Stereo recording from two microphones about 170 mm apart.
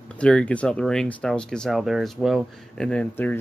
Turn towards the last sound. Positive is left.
turn(degrees=10)  # may be behind; listen again after turning